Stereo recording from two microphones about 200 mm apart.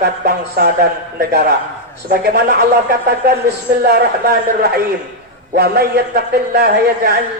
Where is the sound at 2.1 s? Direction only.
55° right (ahead or behind).